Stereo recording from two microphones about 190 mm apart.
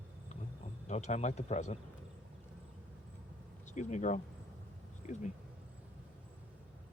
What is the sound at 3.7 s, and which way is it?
Speech, 40° left (ahead or behind).